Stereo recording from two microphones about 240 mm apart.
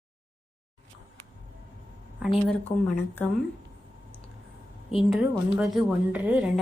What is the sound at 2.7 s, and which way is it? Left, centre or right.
Speech, left.